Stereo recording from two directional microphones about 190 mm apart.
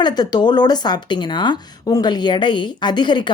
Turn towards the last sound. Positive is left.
turn(degrees=25)  # may be behind; listen again after turning